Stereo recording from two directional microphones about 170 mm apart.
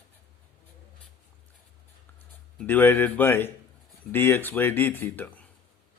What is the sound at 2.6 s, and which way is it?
A man's voice, 10° left (ahead or behind).